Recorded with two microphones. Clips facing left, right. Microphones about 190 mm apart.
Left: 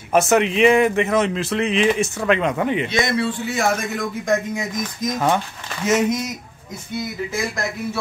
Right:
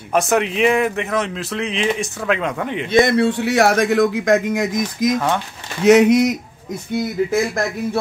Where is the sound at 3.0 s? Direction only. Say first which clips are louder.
Right 6 dB; 60° right (ahead or behind).